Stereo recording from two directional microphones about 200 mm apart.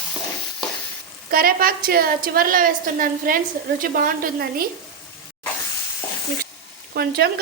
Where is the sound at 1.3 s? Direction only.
45° right (ahead or behind).